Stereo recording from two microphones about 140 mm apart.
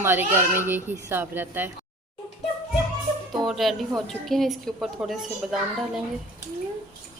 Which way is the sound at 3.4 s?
Centre (ahead or behind).